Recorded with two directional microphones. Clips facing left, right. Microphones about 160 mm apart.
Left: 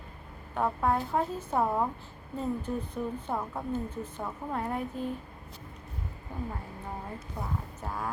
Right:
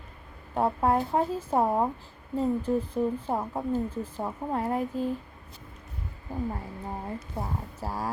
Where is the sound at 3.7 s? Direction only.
30° right (ahead or behind).